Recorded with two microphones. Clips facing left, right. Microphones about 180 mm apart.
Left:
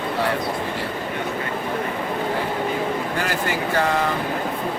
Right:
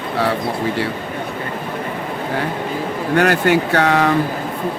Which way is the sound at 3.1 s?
70° right (ahead or behind).